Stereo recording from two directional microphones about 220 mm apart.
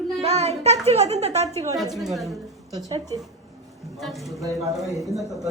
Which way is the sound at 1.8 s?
Centre (ahead or behind).